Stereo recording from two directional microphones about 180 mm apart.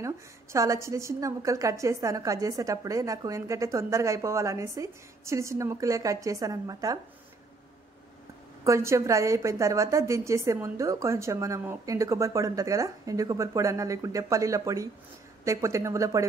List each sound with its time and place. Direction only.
0.0 s a woman's voice: 15° right (ahead or behind)
8.6 s a woman's voice: 15° right (ahead or behind)